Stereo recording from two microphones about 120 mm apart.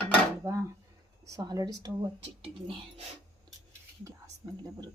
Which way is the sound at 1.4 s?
35° right (ahead or behind).